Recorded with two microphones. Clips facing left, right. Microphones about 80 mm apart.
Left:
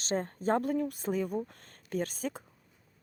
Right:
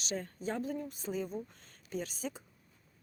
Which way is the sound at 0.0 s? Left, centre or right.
Left.